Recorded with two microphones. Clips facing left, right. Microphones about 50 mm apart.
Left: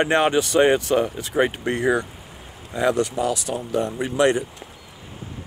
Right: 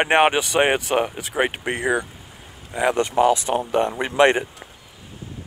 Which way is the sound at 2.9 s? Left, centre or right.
Right.